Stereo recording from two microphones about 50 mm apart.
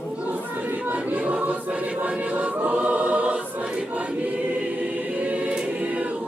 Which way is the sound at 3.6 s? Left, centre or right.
Centre.